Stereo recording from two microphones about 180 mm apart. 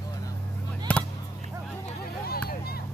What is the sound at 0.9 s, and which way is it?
Chop, 10° left (ahead or behind).